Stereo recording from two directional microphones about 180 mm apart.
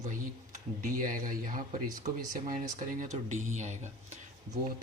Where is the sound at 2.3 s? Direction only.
45° right (ahead or behind).